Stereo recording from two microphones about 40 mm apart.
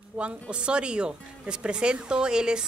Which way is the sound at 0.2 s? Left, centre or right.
Right.